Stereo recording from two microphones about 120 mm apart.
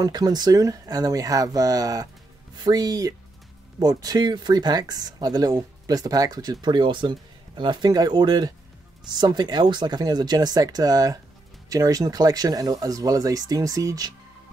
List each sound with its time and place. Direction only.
0.0 s speech: 35° right (ahead or behind)